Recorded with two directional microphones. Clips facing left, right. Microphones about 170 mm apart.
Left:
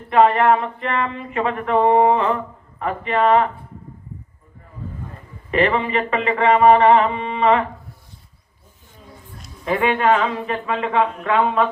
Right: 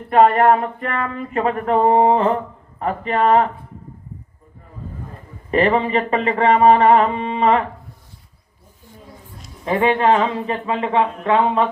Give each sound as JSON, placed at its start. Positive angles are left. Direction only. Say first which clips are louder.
{"t": 0.1, "sound": "a sound", "louder": "right 2 dB", "side_deg": -45}
{"t": 0.9, "sound": "speech", "louder": "left 4 dB", "side_deg": 25}
{"t": 1.1, "sound": "speech", "louder": "right 2 dB", "side_deg": -40}
{"t": 5.5, "sound": "speech", "louder": "right 2 dB", "side_deg": -40}
{"t": 9.6, "sound": "speech", "louder": "right 2 dB", "side_deg": -30}